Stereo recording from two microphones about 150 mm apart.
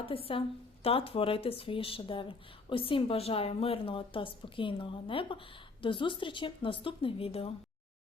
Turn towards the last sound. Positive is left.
turn(degrees=40)  # may be behind; listen again after turning